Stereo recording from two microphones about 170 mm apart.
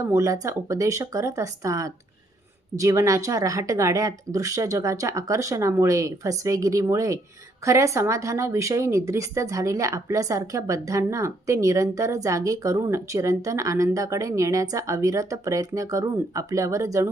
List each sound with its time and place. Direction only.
0.0 s speech: 20° right (ahead or behind)